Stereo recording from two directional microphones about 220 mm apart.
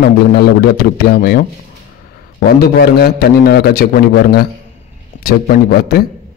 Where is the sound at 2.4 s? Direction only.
45° left (ahead or behind).